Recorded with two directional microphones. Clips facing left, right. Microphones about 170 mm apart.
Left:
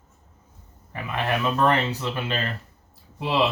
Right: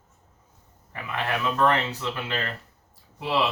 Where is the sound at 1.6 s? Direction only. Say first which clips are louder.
Even; 20° left (ahead or behind).